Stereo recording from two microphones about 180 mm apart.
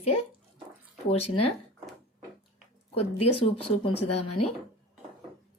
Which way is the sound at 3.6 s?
35° left (ahead or behind).